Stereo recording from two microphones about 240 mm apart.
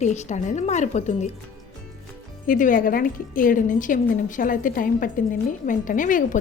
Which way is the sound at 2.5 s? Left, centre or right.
Left.